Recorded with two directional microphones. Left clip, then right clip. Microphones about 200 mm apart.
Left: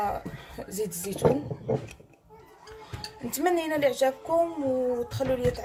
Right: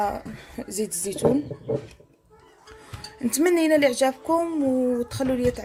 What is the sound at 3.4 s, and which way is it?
Speech, 40° right (ahead or behind).